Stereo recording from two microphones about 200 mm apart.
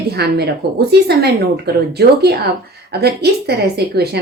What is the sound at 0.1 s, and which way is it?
Speech, 55° right (ahead or behind).